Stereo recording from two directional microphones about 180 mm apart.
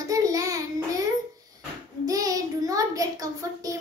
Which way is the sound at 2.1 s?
20° right (ahead or behind).